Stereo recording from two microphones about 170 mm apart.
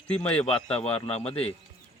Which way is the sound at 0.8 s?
35° left (ahead or behind).